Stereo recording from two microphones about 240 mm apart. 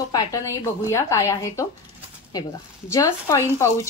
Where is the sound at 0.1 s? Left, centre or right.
Centre.